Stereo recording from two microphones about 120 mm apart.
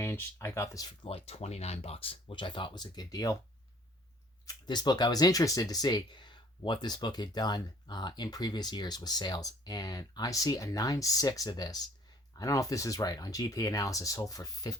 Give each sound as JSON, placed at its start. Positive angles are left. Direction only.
{"t": 0.0, "sound": "speech", "side_deg": 20}
{"t": 1.0, "sound": "speech", "side_deg": 55}
{"t": 2.2, "sound": "speech", "side_deg": 40}
{"t": 4.4, "sound": "speech", "side_deg": 35}